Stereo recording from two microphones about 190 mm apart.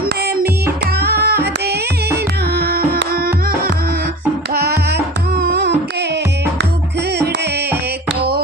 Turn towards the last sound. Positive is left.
turn(degrees=-60)  # may be behind; listen again after turning